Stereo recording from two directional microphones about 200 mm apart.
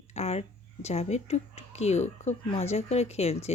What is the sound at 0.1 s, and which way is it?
Speech, 30° left (ahead or behind).